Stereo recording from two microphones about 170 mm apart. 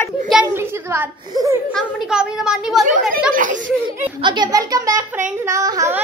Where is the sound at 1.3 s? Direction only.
20° right (ahead or behind).